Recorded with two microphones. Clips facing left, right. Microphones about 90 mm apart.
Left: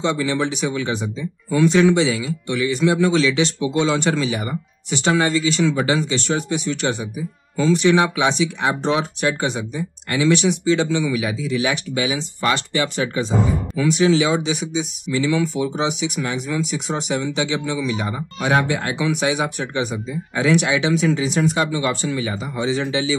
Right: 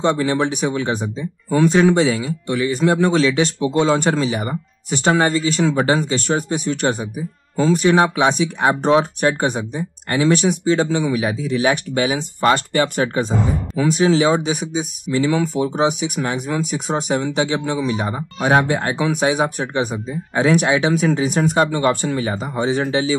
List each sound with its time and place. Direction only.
0.0 s speech: 45° right (ahead or behind)